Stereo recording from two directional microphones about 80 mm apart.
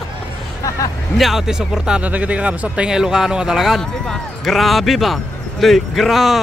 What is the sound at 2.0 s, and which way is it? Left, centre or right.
Speech, centre.